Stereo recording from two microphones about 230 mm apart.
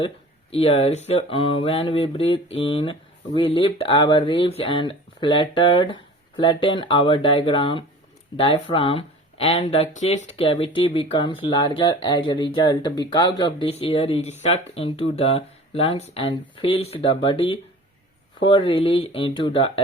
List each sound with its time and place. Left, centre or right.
0.5 s speech: left